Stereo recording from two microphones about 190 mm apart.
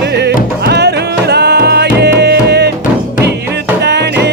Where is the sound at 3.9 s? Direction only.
65° right (ahead or behind).